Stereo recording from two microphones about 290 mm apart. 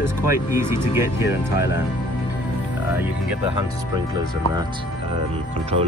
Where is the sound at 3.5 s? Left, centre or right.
Centre.